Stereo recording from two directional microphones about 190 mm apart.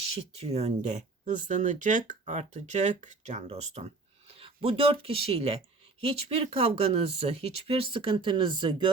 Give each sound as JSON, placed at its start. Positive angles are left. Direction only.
{"t": 0.0, "sound": "speech", "side_deg": -30}